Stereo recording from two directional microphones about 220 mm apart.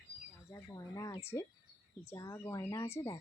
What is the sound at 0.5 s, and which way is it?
Speech, 15° left (ahead or behind).